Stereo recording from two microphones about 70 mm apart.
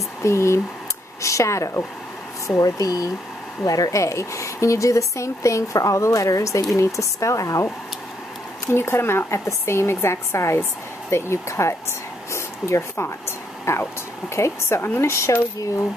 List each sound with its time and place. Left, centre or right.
0.2 s speech: left
8.6 s speech: left
12.3 s a sound: left
13.7 s speech: left